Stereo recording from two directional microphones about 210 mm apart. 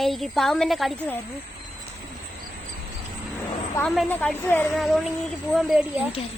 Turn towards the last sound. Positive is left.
turn(degrees=-5)  # may be behind; listen again after turning